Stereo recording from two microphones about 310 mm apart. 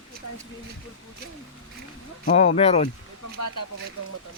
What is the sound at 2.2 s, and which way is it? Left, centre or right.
Speech, left.